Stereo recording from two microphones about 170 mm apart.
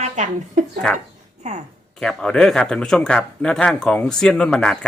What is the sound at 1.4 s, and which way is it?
Speech, 45° right (ahead or behind).